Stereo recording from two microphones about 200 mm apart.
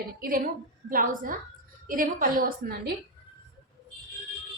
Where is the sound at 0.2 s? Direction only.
45° right (ahead or behind).